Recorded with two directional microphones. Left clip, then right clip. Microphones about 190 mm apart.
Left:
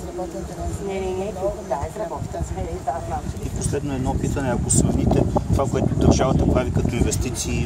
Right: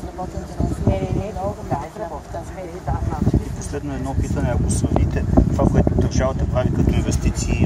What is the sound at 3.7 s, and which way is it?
Speech, 50° left (ahead or behind).